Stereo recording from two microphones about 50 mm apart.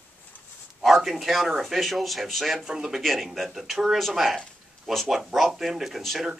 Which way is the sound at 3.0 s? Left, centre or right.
Centre.